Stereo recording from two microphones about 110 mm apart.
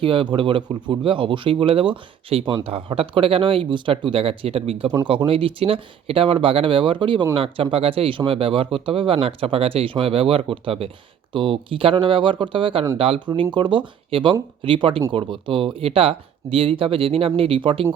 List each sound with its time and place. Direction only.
0.0 s speech: 50° right (ahead or behind)